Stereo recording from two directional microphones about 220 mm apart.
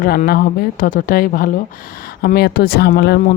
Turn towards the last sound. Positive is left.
turn(degrees=50)  # may be behind; listen again after turning